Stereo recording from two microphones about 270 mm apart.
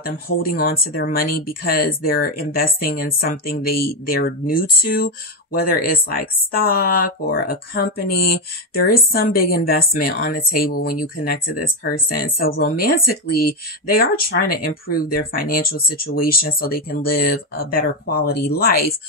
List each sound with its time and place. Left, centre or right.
0.0 s speech: left